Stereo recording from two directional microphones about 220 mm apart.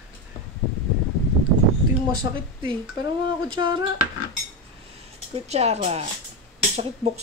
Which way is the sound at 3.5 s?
20° right (ahead or behind).